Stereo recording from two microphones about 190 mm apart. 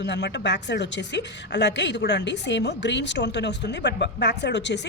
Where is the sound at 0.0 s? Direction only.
65° left (ahead or behind).